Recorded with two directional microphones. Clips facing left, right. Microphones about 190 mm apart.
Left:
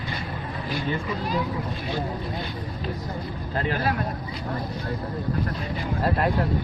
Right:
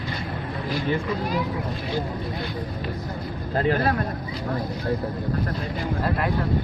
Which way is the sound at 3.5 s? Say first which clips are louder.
Right 5 dB; 35° right (ahead or behind).